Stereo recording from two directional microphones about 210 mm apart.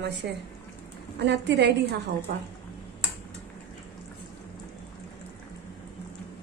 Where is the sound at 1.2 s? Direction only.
55° right (ahead or behind).